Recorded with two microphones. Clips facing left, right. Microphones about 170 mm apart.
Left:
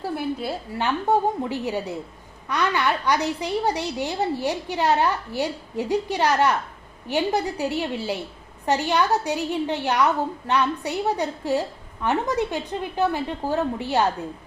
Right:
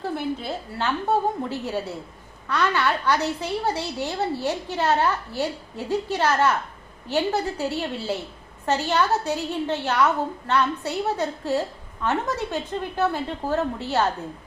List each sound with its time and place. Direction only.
0.0 s a woman's voice: 10° left (ahead or behind)